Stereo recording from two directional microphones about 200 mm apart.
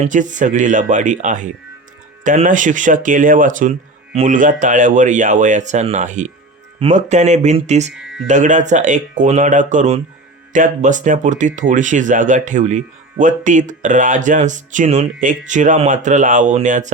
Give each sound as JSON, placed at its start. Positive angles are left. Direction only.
{"t": 0.0, "sound": "speech", "side_deg": -40}
{"t": 8.0, "sound": "music", "side_deg": -5}
{"t": 8.3, "sound": "speech", "side_deg": -35}